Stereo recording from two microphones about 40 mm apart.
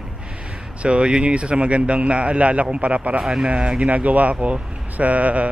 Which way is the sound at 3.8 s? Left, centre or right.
Right.